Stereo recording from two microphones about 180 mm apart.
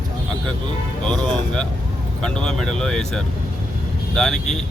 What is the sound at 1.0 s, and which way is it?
Speech, 5° left (ahead or behind).